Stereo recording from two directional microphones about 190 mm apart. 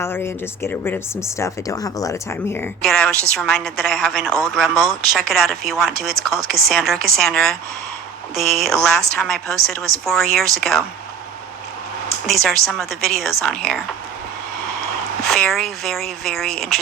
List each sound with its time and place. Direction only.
0.0 s speech: 15° left (ahead or behind)
12.2 s speech: centre (ahead or behind)
15.2 s speech: 5° left (ahead or behind)